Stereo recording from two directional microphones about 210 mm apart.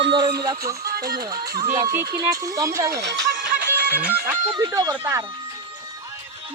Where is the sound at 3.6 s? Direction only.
50° right (ahead or behind).